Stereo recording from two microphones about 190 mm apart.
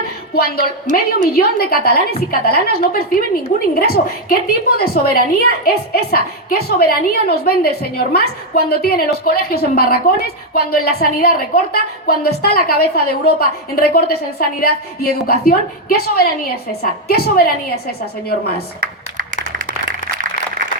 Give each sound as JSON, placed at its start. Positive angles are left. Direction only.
{"t": 0.3, "sound": "a woman's voice", "side_deg": 55}